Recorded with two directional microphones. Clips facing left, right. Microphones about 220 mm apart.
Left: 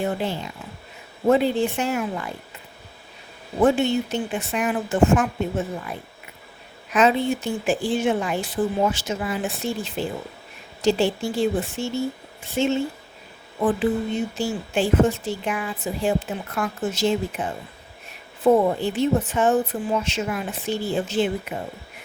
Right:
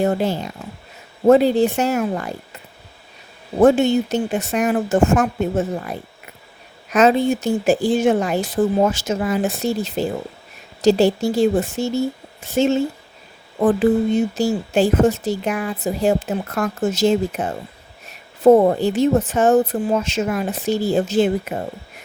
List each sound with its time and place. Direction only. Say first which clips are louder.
0.0 s speech: right 6 dB; 40° right (ahead or behind)
3.6 s speech: right 5 dB; 45° right (ahead or behind)
14.3 s speech: right 6 dB; 40° right (ahead or behind)